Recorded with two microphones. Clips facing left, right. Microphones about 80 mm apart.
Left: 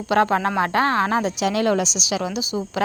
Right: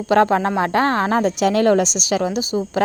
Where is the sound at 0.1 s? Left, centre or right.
Right.